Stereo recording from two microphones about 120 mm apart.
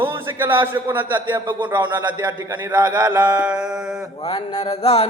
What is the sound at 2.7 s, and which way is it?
A man's voice, 10° right (ahead or behind).